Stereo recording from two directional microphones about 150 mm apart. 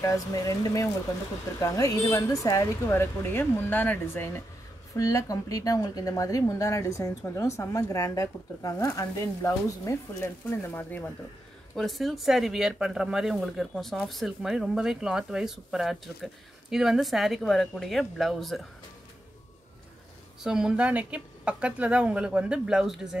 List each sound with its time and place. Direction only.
0.0 s speech: 20° left (ahead or behind)
11.7 s speech: centre (ahead or behind)
20.4 s speech: 5° right (ahead or behind)